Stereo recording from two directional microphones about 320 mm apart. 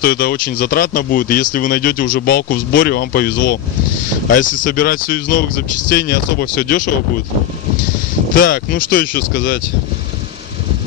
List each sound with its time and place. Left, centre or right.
0.0 s speech: left
8.4 s speech: left